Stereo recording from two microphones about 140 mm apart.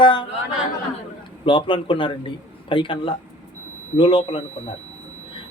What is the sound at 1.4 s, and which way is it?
A man's voice, 35° left (ahead or behind).